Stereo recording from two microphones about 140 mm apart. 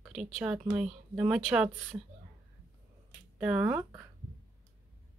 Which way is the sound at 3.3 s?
5° right (ahead or behind).